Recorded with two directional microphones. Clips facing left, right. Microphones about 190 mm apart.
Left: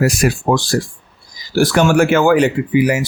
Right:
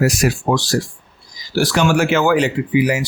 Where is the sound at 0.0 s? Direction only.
55° left (ahead or behind).